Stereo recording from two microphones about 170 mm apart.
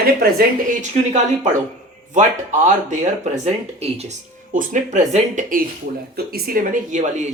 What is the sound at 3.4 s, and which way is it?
Speech, 40° right (ahead or behind).